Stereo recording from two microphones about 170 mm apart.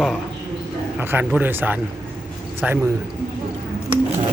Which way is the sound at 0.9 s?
10° right (ahead or behind).